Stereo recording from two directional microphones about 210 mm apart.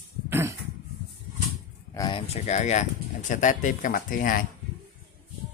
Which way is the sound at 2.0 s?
25° left (ahead or behind).